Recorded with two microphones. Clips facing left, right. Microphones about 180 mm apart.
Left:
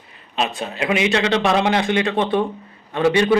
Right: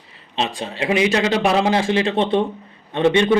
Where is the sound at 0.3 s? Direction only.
25° right (ahead or behind).